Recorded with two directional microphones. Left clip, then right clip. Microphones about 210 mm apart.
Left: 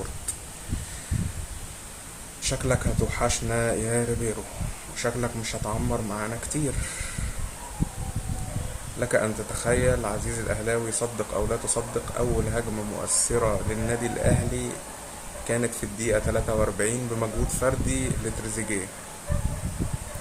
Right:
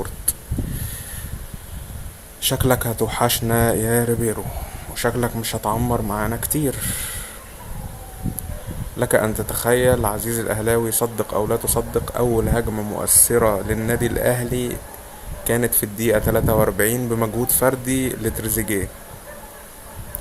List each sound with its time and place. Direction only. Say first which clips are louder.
2.4 s speech: right 7 dB; 40° right (ahead or behind)
9.0 s speech: right 6 dB; 40° right (ahead or behind)
15.4 s speech: right 7 dB; 35° right (ahead or behind)